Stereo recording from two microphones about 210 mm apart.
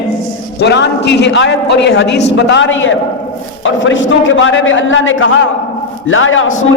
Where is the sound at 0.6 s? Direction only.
55° left (ahead or behind).